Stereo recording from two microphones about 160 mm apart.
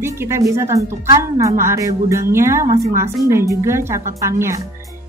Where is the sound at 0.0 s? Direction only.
15° right (ahead or behind).